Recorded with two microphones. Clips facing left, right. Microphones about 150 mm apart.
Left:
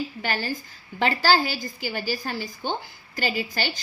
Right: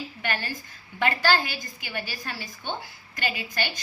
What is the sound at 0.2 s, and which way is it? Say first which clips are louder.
A woman's voice: left 3 dB; 35° left (ahead or behind).